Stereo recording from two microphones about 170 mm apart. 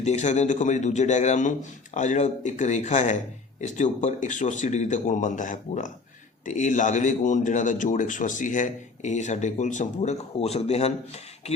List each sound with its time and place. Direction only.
0.0 s a man's voice: 40° left (ahead or behind)